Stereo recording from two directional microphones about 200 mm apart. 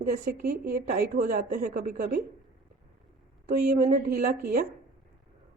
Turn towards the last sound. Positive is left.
turn(degrees=-45)  # may be behind; listen again after turning